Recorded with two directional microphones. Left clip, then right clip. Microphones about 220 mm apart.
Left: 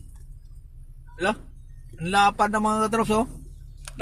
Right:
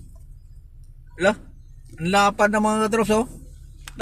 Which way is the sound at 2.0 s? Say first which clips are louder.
Right 2 dB; 30° right (ahead or behind).